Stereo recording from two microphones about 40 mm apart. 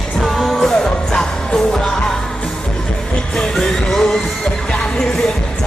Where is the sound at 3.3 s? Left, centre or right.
Centre.